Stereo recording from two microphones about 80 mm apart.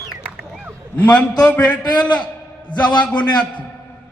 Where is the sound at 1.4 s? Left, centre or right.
Centre.